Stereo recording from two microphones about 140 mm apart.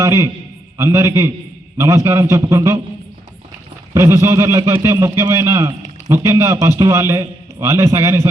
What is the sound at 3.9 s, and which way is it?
A man's voice, 20° right (ahead or behind).